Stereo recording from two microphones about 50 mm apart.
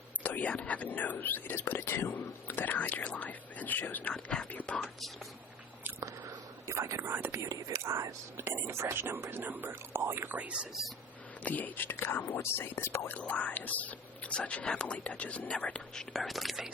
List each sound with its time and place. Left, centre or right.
0.2 s speech: left
2.1 s speech: left
4.1 s speech: centre
4.5 s speech: left
6.0 s whispering: right
7.0 s speech: right
7.3 s speech: right
8.4 s speech: right
8.6 s speech: right
10.8 s speech: centre
11.4 s speech: left
11.9 s speech: left
13.1 s speech: left
16.1 s speech: centre